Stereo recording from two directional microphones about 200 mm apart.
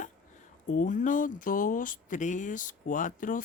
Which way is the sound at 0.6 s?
40° left (ahead or behind).